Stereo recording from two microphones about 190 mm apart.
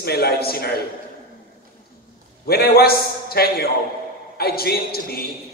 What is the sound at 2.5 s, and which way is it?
A man's voice, 55° left (ahead or behind).